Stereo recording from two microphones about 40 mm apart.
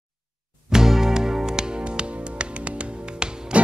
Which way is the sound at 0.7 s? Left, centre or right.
Centre.